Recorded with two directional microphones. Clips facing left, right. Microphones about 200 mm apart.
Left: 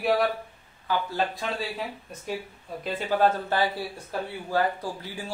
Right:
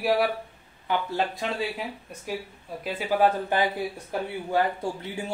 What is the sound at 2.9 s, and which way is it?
Speech, 10° right (ahead or behind).